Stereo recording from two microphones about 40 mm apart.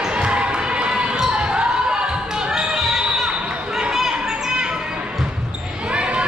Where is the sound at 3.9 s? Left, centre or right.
Centre.